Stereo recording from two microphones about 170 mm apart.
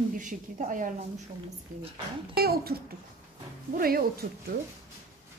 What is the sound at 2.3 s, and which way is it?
Speech, 65° right (ahead or behind).